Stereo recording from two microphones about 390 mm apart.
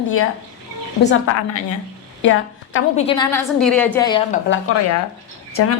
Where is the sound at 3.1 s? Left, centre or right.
Centre.